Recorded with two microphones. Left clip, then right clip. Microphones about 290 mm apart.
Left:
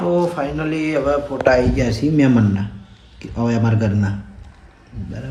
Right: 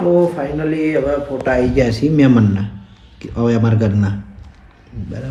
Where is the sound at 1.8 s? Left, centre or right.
Centre.